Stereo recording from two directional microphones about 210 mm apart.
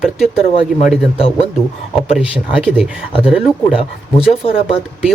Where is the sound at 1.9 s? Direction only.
5° right (ahead or behind).